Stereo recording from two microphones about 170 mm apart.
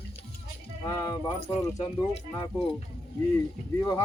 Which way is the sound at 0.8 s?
25° left (ahead or behind).